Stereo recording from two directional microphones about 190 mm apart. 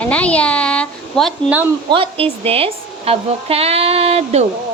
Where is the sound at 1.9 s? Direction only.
30° right (ahead or behind).